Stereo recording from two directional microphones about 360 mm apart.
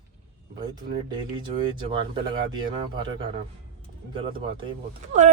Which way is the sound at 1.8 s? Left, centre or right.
Centre.